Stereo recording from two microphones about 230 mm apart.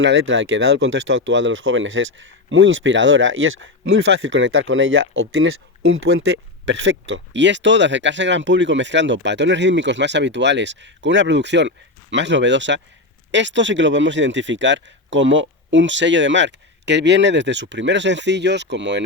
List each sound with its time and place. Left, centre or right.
0.0 s speech: right